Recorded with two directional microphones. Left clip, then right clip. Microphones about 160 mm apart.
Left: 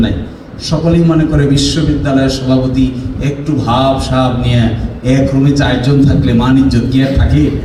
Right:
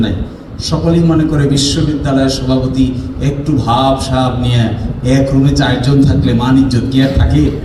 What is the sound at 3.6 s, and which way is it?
A man's voice, 45° right (ahead or behind).